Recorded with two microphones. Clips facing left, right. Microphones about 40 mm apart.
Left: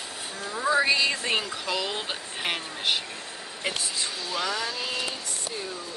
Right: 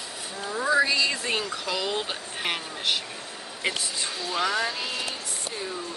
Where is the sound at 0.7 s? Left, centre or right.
Centre.